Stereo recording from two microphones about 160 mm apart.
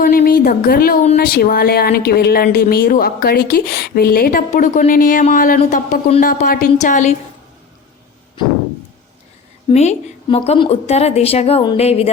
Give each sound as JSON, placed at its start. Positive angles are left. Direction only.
{"t": 0.0, "sound": "a sound", "side_deg": 65}
{"t": 1.1, "sound": "speech", "side_deg": 70}
{"t": 6.8, "sound": "a woman's voice", "side_deg": 50}
{"t": 9.7, "sound": "a woman's voice", "side_deg": 45}